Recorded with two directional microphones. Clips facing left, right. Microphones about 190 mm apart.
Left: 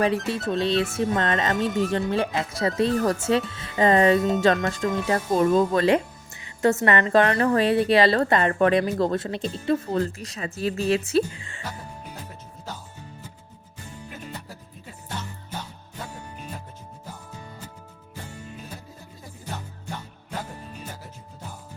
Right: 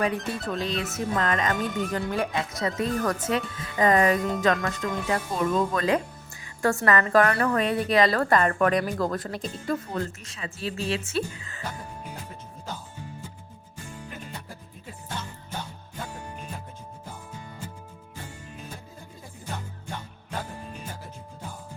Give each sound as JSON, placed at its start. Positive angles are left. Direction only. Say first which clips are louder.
{"t": 0.3, "sound": "speech", "louder": "left 5 dB", "side_deg": 25}